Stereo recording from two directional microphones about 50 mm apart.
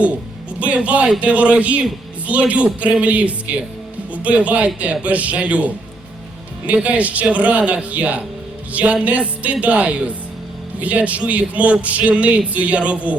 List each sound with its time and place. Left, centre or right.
0.6 s a man's voice: right